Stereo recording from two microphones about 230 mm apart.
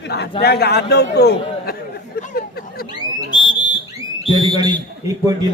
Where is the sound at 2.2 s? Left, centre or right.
Left.